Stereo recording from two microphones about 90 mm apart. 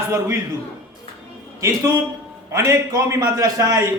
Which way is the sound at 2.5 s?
35° right (ahead or behind).